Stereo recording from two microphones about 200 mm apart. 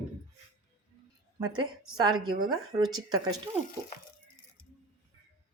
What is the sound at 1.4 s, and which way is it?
Speech, 20° right (ahead or behind).